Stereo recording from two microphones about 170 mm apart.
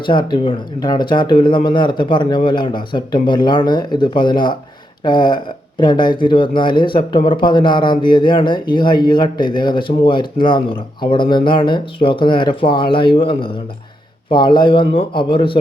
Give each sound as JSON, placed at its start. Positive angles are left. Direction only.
{"t": 0.0, "sound": "speech", "side_deg": 25}